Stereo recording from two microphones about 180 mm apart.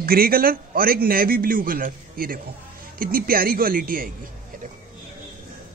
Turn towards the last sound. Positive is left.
turn(degrees=-50)  # may be behind; listen again after turning